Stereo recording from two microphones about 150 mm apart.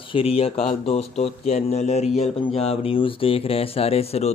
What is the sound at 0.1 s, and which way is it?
Speech, 40° left (ahead or behind).